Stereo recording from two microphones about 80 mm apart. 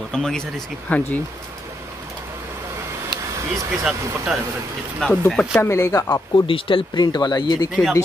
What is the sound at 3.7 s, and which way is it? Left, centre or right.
Speech, centre.